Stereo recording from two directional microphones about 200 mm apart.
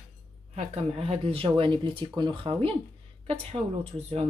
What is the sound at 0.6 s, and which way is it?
Speech, 30° right (ahead or behind).